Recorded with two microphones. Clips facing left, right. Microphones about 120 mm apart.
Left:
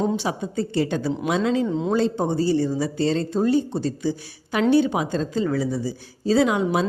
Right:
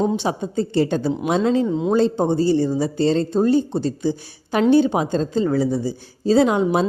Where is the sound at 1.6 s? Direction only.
10° right (ahead or behind).